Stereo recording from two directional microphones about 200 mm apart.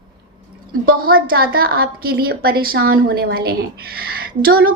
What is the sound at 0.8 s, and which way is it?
A woman's voice, 45° right (ahead or behind).